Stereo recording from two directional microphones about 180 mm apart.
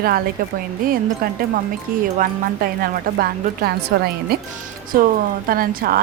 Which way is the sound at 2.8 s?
55° right (ahead or behind).